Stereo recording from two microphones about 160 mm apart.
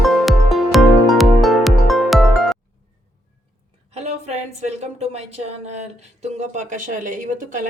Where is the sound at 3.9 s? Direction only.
40° right (ahead or behind).